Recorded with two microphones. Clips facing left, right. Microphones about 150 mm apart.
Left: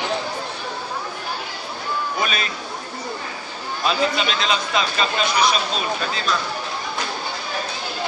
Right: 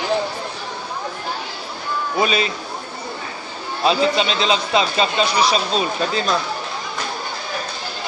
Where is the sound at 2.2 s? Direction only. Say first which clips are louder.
Right 9 dB; 25° right (ahead or behind).